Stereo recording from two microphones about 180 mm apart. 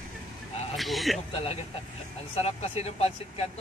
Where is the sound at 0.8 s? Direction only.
Centre (ahead or behind).